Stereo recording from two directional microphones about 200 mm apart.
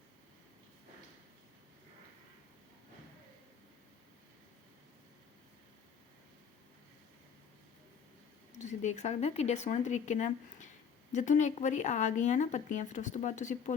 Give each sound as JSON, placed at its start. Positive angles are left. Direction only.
{"t": 8.5, "sound": "speech", "side_deg": 35}